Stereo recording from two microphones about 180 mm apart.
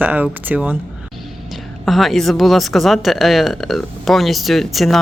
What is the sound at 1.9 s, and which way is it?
Speech, centre (ahead or behind).